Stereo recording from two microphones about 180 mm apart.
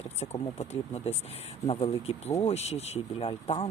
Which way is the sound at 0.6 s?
35° left (ahead or behind).